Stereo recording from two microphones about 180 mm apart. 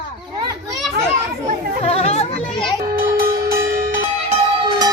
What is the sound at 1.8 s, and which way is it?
Chatter, 35° left (ahead or behind).